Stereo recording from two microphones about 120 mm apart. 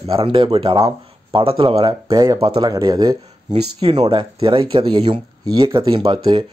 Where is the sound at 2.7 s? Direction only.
35° right (ahead or behind).